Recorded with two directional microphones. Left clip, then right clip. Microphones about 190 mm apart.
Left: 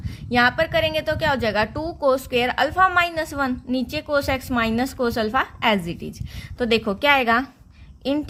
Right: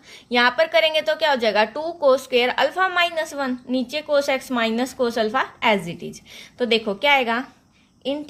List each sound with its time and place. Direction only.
0.3 s a woman's voice: 25° left (ahead or behind)